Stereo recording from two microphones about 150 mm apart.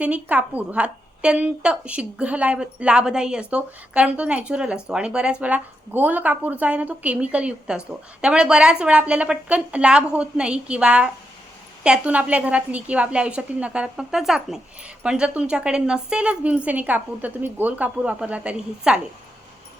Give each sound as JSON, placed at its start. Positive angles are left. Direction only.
{"t": 0.0, "sound": "a woman's voice", "side_deg": -10}